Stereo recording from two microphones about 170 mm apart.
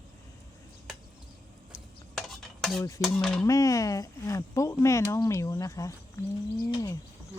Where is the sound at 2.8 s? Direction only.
20° left (ahead or behind).